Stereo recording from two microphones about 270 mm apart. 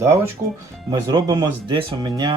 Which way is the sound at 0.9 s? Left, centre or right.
Centre.